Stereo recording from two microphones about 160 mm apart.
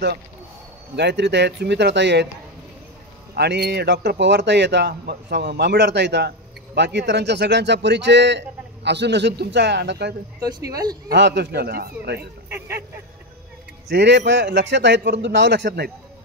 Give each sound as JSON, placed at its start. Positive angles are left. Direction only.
{"t": 0.9, "sound": "speech", "side_deg": -90}
{"t": 3.3, "sound": "speech", "side_deg": -90}
{"t": 10.4, "sound": "speech", "side_deg": -25}
{"t": 11.1, "sound": "speech", "side_deg": -90}
{"t": 12.2, "sound": "speech", "side_deg": -15}
{"t": 13.8, "sound": "speech", "side_deg": -90}